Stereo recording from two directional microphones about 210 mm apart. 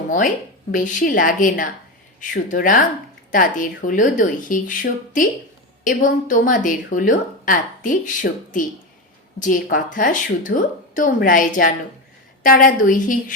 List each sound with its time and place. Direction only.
0.7 s a woman's voice: 40° left (ahead or behind)